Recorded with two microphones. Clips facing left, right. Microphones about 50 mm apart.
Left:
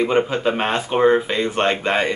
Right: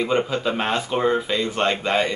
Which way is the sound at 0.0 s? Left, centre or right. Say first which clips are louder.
Left 3 dB; left.